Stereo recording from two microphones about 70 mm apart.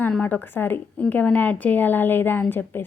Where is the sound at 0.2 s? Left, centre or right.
Left.